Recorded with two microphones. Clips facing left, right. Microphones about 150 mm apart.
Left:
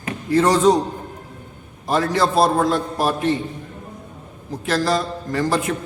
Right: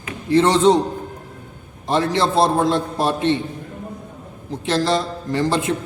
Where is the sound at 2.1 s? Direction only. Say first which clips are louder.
Left 1 dB; 25° right (ahead or behind).